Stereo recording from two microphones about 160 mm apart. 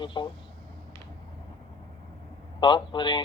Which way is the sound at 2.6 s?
30° left (ahead or behind).